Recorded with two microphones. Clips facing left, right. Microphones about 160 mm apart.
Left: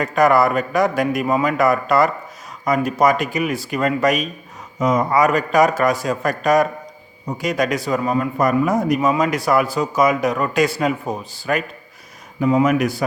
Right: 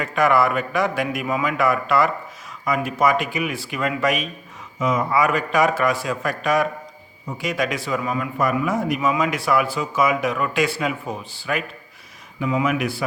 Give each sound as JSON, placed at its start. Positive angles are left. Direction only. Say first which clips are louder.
{"t": 0.0, "sound": "a man's voice", "louder": "left 3 dB", "side_deg": 40}